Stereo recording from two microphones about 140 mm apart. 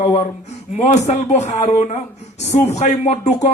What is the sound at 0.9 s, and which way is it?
A man's voice, 55° left (ahead or behind).